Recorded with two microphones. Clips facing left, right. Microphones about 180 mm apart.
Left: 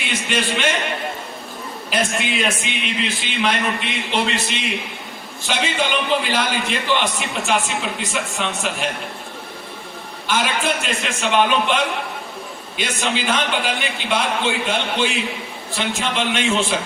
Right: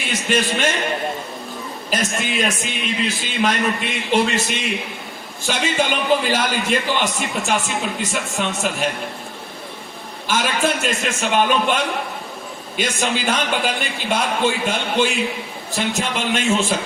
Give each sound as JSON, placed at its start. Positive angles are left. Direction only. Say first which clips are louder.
{"t": 0.1, "sound": "speech", "louder": "right 2 dB", "side_deg": -45}
{"t": 1.9, "sound": "a man's voice", "louder": "left 1 dB", "side_deg": -45}
{"t": 10.2, "sound": "a man's voice", "louder": "right 1 dB", "side_deg": -45}